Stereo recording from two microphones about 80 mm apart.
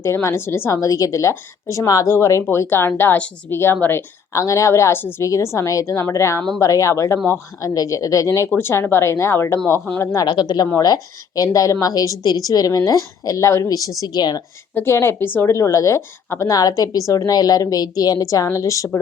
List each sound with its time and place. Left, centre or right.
0.0 s speech: left
0.7 s speech: left
4.3 s a woman's voice: left
8.4 s speech: left
10.2 s speech: left
10.8 s a woman's voice: left
14.0 s speech: left
14.8 s speech: left
16.5 s a woman's voice: left